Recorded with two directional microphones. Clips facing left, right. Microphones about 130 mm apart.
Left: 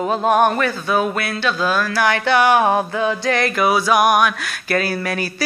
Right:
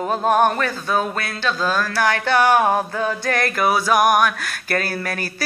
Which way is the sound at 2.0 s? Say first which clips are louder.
Left 2 dB; 45° right (ahead or behind).